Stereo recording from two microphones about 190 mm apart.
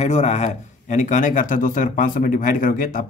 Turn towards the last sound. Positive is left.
turn(degrees=50)  # may be behind; listen again after turning